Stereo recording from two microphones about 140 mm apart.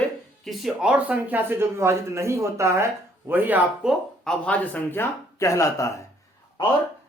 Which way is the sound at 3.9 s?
5° left (ahead or behind).